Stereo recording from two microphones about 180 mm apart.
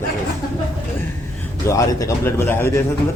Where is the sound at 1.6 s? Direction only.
15° left (ahead or behind).